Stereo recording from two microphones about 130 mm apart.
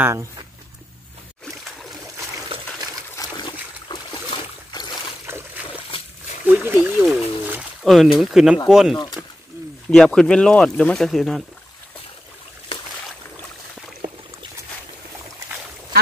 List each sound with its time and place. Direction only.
0.0 s speech: 20° right (ahead or behind)
2.5 s water: 45° right (ahead or behind)
3.2 s trickle: 35° left (ahead or behind)
3.9 s boat: 35° left (ahead or behind)
5.3 s boat: 20° right (ahead or behind)
6.4 s speech: 15° right (ahead or behind)
7.8 s speech: centre (ahead or behind)
9.2 s a sound: 15° right (ahead or behind)
9.8 s speech: 5° left (ahead or behind)